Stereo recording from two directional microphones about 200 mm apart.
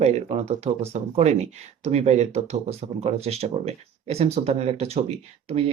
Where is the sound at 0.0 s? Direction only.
35° right (ahead or behind).